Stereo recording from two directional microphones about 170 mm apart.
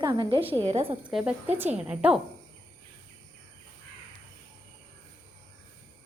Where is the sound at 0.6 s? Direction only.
40° right (ahead or behind).